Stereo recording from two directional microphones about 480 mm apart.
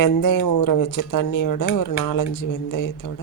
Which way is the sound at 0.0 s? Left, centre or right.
Left.